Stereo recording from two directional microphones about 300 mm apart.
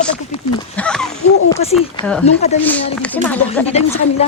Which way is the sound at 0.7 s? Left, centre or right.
Centre.